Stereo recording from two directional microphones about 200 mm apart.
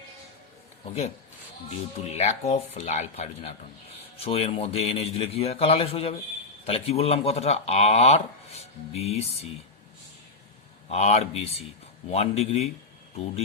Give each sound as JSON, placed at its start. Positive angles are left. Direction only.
{"t": 1.7, "sound": "speech", "side_deg": 35}
{"t": 10.8, "sound": "speech", "side_deg": 35}